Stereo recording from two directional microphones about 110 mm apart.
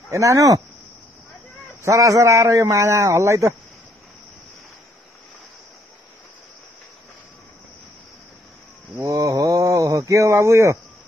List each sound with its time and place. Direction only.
0.1 s a man's voice: 30° right (ahead or behind)
1.8 s a man's voice: 30° right (ahead or behind)
9.0 s a sound: 30° right (ahead or behind)